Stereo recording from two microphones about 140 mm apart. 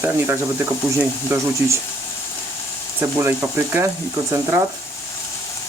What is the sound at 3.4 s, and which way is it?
Speech, 15° right (ahead or behind).